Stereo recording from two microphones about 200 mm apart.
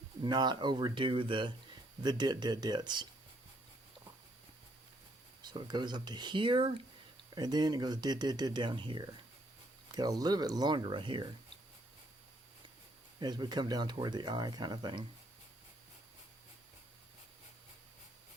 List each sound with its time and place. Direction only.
0.2 s speech: 20° right (ahead or behind)
5.4 s speech: 20° right (ahead or behind)
13.1 s speech: 20° right (ahead or behind)